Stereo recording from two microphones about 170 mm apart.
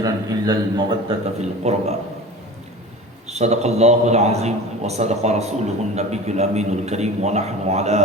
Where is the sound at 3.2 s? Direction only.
40° right (ahead or behind).